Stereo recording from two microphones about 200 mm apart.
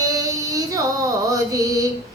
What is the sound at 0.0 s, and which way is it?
Child singing, 15° right (ahead or behind).